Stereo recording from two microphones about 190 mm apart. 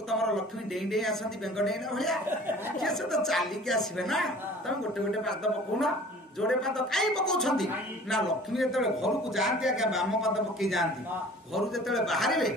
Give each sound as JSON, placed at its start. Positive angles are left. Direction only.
{"t": 0.1, "sound": "a man's voice", "side_deg": 0}